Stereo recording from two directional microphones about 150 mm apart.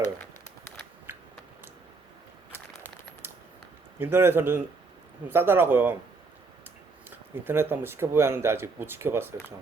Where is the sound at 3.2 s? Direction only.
15° right (ahead or behind).